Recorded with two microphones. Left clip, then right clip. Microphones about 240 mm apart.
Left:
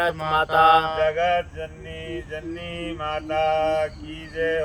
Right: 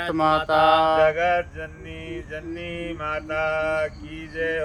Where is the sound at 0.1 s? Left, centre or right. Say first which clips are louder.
Right 2 dB; right.